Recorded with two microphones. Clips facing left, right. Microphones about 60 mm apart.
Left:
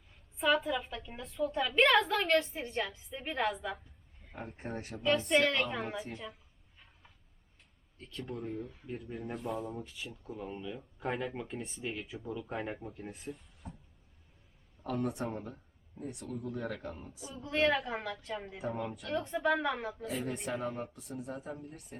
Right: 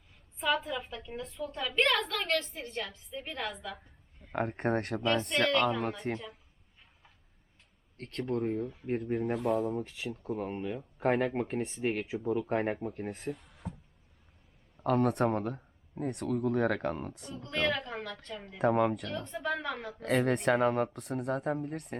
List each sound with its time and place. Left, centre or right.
0.3 s a woman's voice: centre
4.3 s speech: right
5.3 s a woman's voice: centre
6.1 s speech: right
7.9 s speech: right
8.3 s speech: right
9.3 s speech: right
12.9 s speech: right
14.8 s speech: right
17.2 s a woman's voice: centre
18.6 s speech: right
19.0 s a woman's voice: centre
20.0 s speech: right